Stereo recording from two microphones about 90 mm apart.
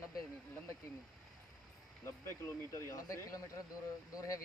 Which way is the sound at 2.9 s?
35° left (ahead or behind).